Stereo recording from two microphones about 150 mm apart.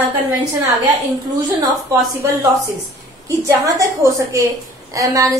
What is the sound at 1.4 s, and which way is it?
Speech, 30° right (ahead or behind).